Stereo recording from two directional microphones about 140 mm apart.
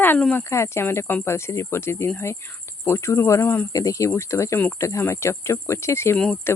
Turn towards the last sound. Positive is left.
turn(degrees=5)  # may be behind; listen again after turning